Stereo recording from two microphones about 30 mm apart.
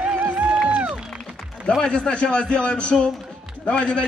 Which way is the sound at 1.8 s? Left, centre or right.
Left.